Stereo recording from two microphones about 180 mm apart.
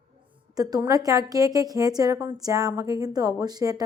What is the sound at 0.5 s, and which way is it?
A woman's voice, 20° right (ahead or behind).